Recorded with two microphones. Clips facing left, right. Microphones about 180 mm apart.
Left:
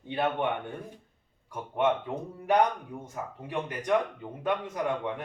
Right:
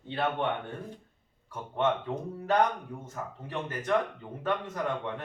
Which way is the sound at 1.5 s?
15° left (ahead or behind).